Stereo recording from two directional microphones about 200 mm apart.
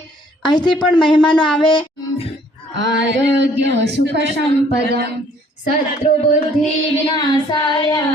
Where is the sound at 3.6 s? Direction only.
60° right (ahead or behind).